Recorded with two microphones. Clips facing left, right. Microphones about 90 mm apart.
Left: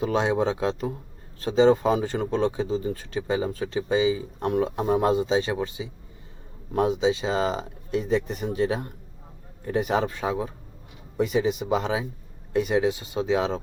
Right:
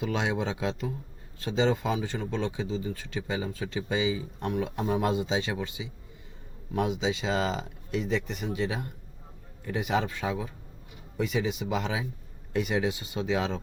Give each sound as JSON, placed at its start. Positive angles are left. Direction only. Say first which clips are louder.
{"t": 0.0, "sound": "speech", "louder": "left 6 dB", "side_deg": 35}
{"t": 11.2, "sound": "speech", "louder": "left 6 dB", "side_deg": 45}
{"t": 11.7, "sound": "speech", "louder": "left 5 dB", "side_deg": 30}